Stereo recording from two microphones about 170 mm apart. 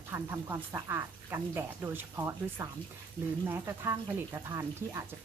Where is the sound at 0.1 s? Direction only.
15° right (ahead or behind).